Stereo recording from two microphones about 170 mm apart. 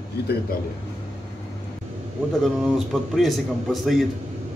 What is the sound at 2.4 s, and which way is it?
A man's voice, 5° right (ahead or behind).